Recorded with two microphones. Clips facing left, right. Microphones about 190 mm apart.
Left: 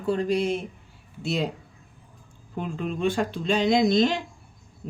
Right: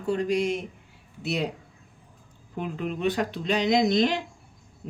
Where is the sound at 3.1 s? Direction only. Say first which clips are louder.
Left 2 dB; 25° left (ahead or behind).